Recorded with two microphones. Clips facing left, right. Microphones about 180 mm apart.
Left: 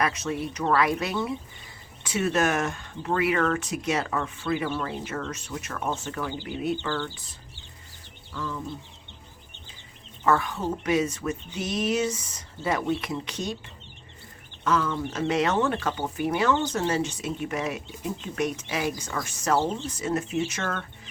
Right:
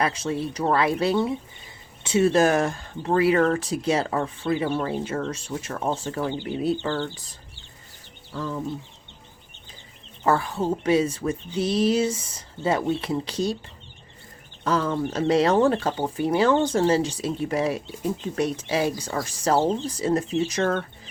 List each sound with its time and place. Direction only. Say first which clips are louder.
0.0 s speech: right 2 dB; 30° right (ahead or behind)
8.3 s speech: right 4 dB; 35° right (ahead or behind)
10.2 s speech: right 2 dB; 30° right (ahead or behind)
14.6 s speech: right 2 dB; 35° right (ahead or behind)